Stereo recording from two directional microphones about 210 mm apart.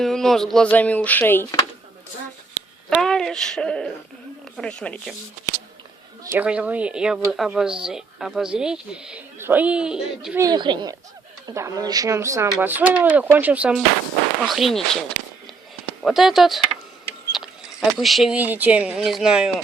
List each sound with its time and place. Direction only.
0.0 s speech: centre (ahead or behind)
2.9 s speech: centre (ahead or behind)
6.3 s speech: 5° right (ahead or behind)
10.4 s speech: 20° right (ahead or behind); by 14.8 s centre (ahead or behind)
16.0 s speech: centre (ahead or behind)